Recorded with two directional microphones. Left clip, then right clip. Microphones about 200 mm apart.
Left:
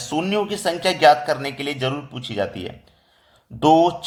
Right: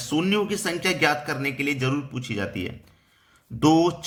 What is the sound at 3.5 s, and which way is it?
Speech, 20° right (ahead or behind).